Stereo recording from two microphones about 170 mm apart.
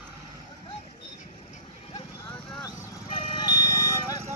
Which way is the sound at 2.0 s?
30° left (ahead or behind).